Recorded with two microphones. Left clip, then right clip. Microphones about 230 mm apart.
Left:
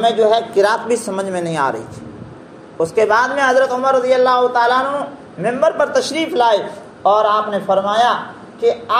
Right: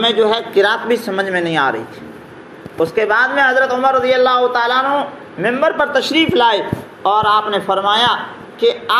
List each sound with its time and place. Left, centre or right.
0.0 s a man's voice: right
2.8 s a man's voice: centre; by 8.9 s right